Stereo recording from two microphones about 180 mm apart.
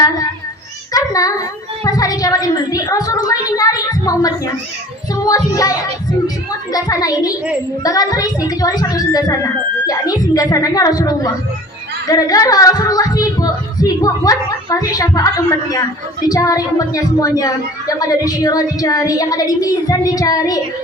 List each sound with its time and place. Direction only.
0.9 s child singing: 20° left (ahead or behind)
1.8 s a sound: 20° left (ahead or behind)
6.7 s speech: 20° left (ahead or behind)